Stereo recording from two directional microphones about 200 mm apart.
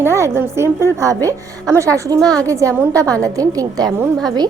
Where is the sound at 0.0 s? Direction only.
10° right (ahead or behind).